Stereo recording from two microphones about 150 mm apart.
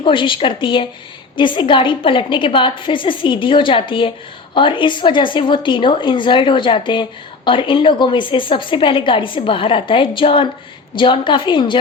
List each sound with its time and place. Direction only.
0.0 s speech: 35° left (ahead or behind)